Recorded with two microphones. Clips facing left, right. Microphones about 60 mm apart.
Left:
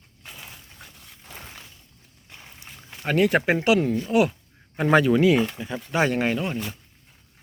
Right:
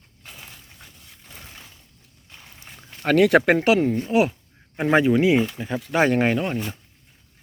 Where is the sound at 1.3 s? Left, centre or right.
Left.